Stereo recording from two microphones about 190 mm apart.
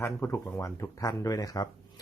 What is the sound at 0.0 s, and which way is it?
Speech, 10° left (ahead or behind).